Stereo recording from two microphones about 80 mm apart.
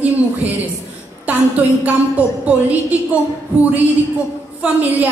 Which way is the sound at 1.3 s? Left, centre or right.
Centre.